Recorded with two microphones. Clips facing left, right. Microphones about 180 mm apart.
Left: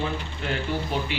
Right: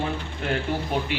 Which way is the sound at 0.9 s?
50° right (ahead or behind).